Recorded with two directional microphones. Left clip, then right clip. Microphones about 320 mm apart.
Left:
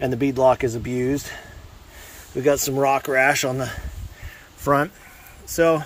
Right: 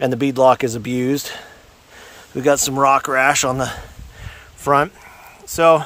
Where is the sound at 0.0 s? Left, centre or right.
Centre.